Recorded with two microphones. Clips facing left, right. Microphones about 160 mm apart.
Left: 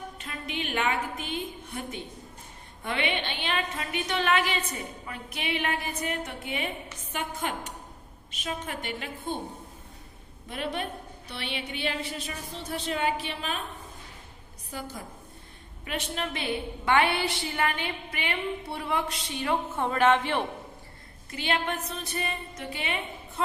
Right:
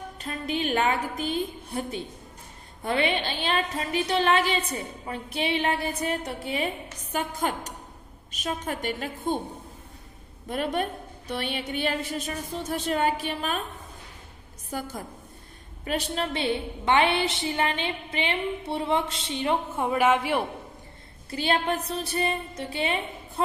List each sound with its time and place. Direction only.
0.2 s a woman's voice: 40° right (ahead or behind)
10.5 s a woman's voice: 45° right (ahead or behind)
14.7 s a woman's voice: 45° right (ahead or behind)
15.8 s a woman's voice: 35° right (ahead or behind)
19.7 s speech: 10° right (ahead or behind)
21.2 s a woman's voice: 35° right (ahead or behind)